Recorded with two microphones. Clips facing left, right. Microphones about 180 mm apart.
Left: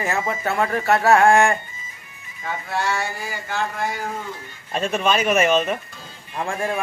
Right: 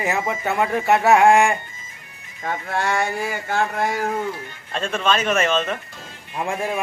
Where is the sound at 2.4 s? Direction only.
50° right (ahead or behind).